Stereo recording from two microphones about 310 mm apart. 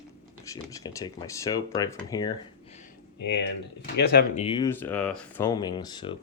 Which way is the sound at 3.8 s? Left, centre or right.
Left.